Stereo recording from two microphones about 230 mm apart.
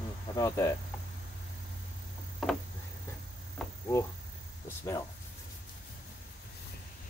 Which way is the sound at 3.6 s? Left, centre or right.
Centre.